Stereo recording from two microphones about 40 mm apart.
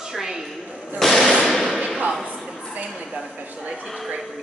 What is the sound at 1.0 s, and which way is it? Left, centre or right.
Speech, centre.